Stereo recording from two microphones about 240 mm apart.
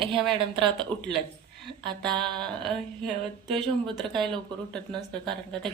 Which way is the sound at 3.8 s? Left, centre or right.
Centre.